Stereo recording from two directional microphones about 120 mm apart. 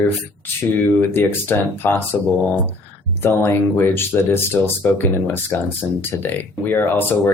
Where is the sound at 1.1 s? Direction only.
15° left (ahead or behind).